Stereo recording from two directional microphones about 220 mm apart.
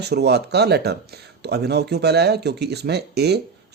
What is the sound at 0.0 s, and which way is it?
Speech, 50° right (ahead or behind).